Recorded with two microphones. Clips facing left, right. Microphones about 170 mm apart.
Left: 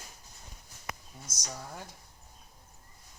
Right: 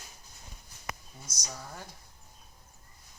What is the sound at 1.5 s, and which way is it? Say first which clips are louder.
Speech: left 1 dB; 10° left (ahead or behind).